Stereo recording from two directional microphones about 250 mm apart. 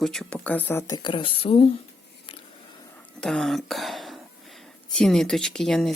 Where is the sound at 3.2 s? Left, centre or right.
Centre.